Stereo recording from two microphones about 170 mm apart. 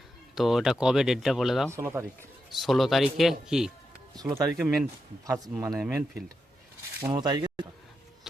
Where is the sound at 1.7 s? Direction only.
15° right (ahead or behind).